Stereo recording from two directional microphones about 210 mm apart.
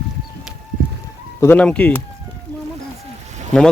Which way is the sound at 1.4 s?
10° left (ahead or behind).